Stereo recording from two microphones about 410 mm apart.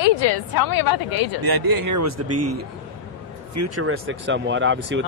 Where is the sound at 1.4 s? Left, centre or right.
Right.